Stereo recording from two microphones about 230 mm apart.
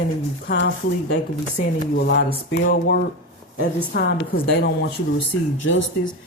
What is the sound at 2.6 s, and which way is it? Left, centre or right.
Speech, left.